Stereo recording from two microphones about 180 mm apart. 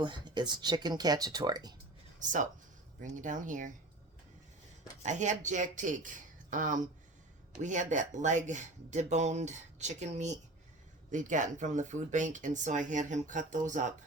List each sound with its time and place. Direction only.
0.0 s speech: 25° right (ahead or behind)
2.1 s speech: 45° right (ahead or behind)
5.0 s speech: 40° right (ahead or behind)